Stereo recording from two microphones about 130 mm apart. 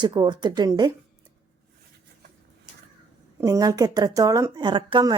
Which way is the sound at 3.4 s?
30° right (ahead or behind).